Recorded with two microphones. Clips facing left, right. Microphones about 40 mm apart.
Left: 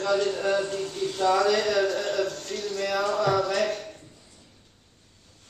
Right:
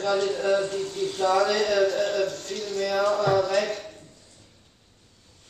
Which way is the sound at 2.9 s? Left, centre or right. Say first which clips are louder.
Right 2 dB; centre.